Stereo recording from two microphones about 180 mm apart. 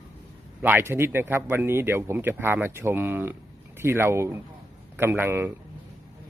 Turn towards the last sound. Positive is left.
turn(degrees=-10)  # may be behind; listen again after turning